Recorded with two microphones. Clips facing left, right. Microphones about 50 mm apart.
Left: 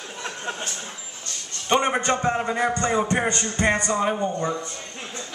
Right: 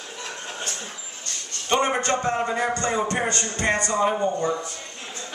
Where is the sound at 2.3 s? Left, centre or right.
Centre.